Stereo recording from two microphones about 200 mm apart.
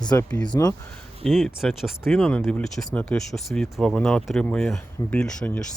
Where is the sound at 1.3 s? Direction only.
Centre (ahead or behind).